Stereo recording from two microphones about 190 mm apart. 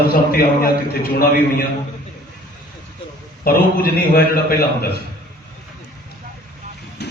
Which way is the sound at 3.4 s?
55° left (ahead or behind).